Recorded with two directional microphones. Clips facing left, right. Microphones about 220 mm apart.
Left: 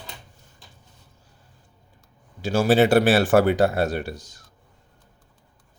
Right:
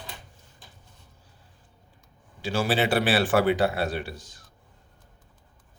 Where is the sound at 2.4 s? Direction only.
45° left (ahead or behind).